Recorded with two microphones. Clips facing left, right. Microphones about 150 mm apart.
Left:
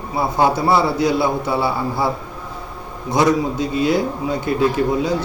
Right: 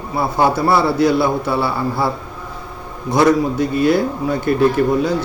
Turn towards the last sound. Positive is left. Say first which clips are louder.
# right 2 dB
turn(degrees=20)  # may be behind; listen again after turning